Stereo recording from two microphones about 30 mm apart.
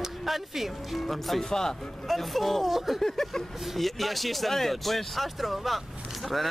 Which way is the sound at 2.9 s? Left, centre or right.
Centre.